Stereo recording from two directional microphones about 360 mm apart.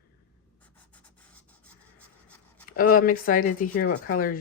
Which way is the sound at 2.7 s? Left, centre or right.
Left.